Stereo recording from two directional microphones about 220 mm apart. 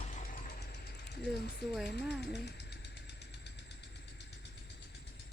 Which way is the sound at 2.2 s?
50° left (ahead or behind).